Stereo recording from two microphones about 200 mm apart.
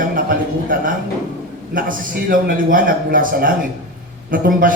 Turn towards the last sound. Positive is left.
turn(degrees=-45)  # may be behind; listen again after turning